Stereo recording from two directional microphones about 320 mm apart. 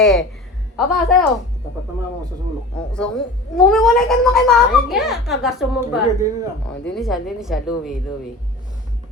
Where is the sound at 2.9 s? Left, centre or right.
Centre.